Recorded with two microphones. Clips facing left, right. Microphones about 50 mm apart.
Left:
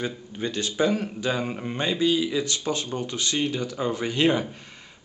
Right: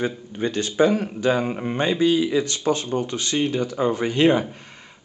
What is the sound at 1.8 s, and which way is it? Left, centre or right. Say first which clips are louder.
A man's voice: right 4 dB; right.